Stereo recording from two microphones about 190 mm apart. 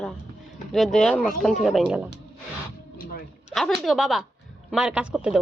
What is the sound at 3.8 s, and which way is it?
A woman's voice, centre (ahead or behind).